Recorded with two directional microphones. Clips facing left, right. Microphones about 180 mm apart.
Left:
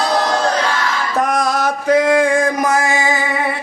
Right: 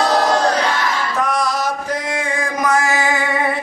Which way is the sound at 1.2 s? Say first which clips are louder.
Left 3 dB; 45° left (ahead or behind).